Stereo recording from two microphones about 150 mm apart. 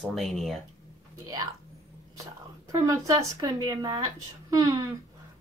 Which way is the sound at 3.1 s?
25° right (ahead or behind).